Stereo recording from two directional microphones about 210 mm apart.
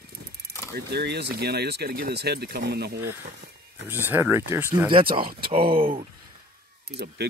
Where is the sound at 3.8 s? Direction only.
10° right (ahead or behind).